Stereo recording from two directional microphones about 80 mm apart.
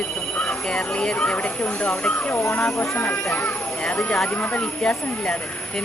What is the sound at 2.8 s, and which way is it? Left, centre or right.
Speech, left.